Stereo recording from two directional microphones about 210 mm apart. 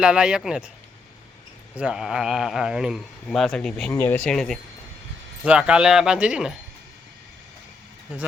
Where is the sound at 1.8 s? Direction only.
5° right (ahead or behind).